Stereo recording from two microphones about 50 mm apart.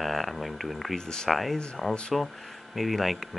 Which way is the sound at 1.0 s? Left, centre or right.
Centre.